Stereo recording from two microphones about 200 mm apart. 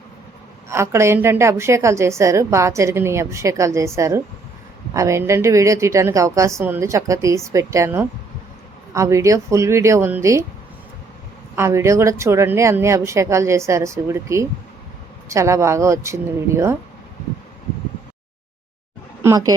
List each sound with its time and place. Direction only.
0.7 s a woman's voice: 15° right (ahead or behind)
11.5 s a woman's voice: 15° right (ahead or behind)
19.2 s speech: 15° right (ahead or behind)